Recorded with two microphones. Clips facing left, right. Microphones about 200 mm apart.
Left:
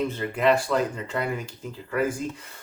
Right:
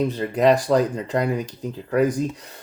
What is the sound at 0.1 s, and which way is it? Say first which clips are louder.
Speech: right 4 dB; 35° right (ahead or behind).